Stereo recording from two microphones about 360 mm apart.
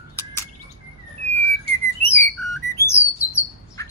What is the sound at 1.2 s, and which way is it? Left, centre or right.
Whistling, left.